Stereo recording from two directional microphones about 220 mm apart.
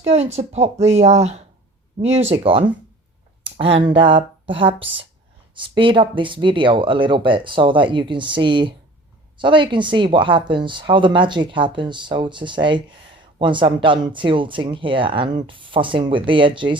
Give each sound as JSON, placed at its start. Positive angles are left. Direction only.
{"t": 0.0, "sound": "speech", "side_deg": -30}